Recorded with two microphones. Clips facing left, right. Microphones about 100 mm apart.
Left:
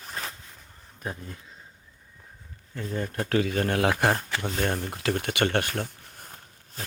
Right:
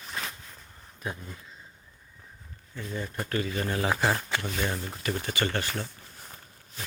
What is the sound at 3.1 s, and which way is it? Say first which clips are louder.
Speech: left 6 dB; 80° left.